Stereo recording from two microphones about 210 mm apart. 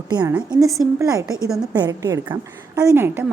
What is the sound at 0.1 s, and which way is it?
Speech, 20° right (ahead or behind).